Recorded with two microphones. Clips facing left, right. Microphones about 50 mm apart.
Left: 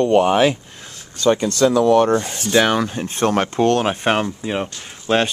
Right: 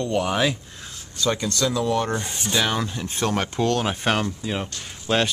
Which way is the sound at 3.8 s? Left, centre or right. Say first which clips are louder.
Left 5 dB; left.